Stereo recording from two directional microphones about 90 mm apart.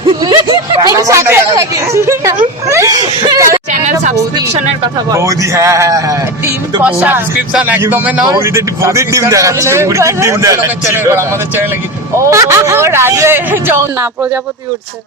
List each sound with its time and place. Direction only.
0.2 s a sound: 50° right (ahead or behind)
0.9 s a man's voice: 35° right (ahead or behind)
6.8 s a man's voice: 15° right (ahead or behind)
8.3 s a man's voice: 30° right (ahead or behind)